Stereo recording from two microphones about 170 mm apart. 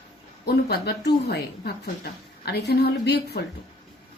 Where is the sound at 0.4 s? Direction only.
70° left (ahead or behind).